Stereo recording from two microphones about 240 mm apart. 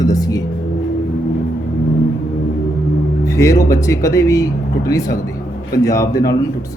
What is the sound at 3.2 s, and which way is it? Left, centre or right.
Speech, centre.